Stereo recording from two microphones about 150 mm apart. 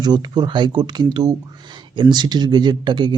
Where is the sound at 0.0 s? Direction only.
30° right (ahead or behind).